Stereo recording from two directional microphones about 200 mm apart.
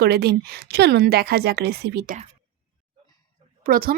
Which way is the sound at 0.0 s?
55° right (ahead or behind).